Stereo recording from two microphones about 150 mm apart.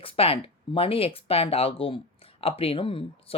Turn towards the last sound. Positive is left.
turn(degrees=35)  # may be behind; listen again after turning